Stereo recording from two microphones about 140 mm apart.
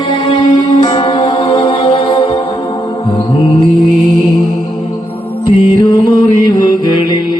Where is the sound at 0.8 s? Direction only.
35° left (ahead or behind).